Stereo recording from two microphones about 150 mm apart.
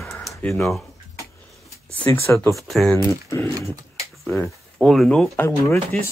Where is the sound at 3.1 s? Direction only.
20° left (ahead or behind).